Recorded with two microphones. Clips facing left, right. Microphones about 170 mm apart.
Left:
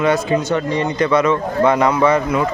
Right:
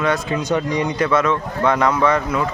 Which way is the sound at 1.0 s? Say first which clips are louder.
Left 5 dB; centre (ahead or behind).